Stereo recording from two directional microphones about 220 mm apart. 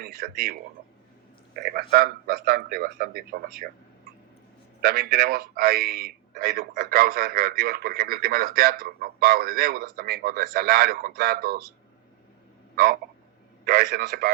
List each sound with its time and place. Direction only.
0.0 s speech: 45° right (ahead or behind)
1.5 s a man's voice: 45° right (ahead or behind)
4.8 s a man's voice: 45° right (ahead or behind)
12.7 s a man's voice: 45° right (ahead or behind)